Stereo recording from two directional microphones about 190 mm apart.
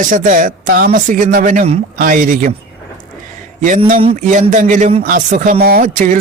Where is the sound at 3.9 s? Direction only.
35° right (ahead or behind).